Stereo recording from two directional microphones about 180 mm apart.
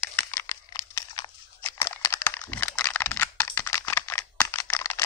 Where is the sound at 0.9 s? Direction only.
20° left (ahead or behind).